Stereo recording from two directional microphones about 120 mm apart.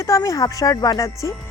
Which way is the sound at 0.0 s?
25° left (ahead or behind).